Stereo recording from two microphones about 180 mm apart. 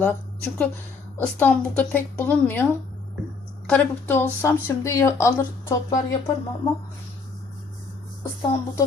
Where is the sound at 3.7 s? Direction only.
10° left (ahead or behind).